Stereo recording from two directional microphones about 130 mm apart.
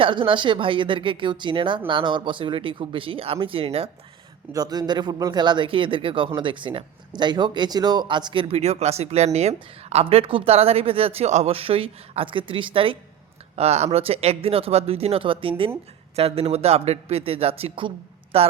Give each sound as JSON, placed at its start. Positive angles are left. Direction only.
{"t": 0.0, "sound": "speech", "side_deg": -40}
{"t": 4.5, "sound": "a man's voice", "side_deg": -30}
{"t": 13.6, "sound": "a man's voice", "side_deg": -55}